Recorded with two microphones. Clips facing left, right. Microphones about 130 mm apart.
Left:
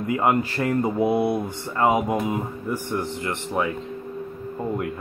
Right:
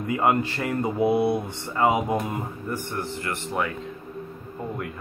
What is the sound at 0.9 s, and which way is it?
Speech, 20° left (ahead or behind).